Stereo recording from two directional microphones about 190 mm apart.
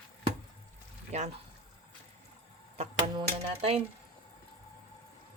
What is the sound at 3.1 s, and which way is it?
Speech, 30° right (ahead or behind).